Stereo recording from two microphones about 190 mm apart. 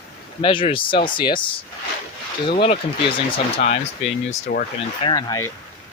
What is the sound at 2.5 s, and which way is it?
Speech, 35° left (ahead or behind).